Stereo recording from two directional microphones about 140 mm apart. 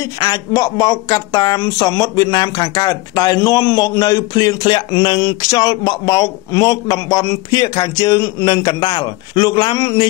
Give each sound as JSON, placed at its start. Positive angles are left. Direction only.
{"t": 0.2, "sound": "speech", "side_deg": 25}